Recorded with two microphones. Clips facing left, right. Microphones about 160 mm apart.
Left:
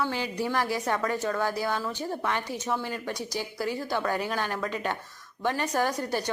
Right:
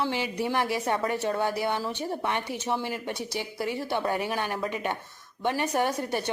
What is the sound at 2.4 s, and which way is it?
Speech, 65° right (ahead or behind).